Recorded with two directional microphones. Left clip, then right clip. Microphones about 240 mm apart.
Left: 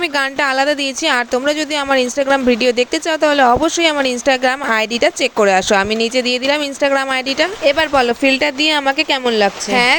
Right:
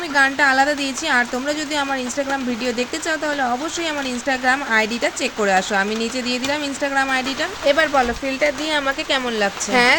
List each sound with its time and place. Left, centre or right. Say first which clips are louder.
0.2 s speech: right 2 dB; left
9.7 s speech: left 1 dB; left